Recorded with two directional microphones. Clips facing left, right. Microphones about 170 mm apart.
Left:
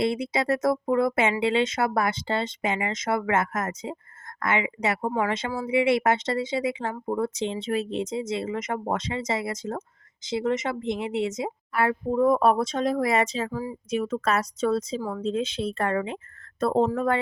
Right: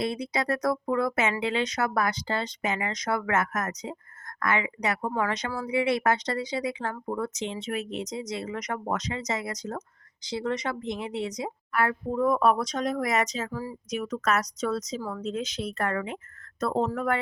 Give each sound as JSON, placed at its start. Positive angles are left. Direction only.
{"t": 0.0, "sound": "speech", "side_deg": 25}
{"t": 7.1, "sound": "speech", "side_deg": 30}